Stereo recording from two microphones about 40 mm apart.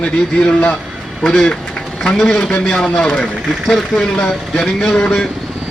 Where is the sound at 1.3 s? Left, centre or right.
Centre.